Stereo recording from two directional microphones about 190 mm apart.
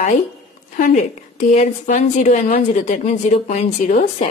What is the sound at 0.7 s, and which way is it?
Speech, 40° left (ahead or behind).